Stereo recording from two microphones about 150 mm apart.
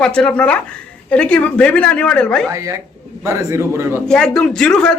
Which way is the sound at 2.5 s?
20° right (ahead or behind).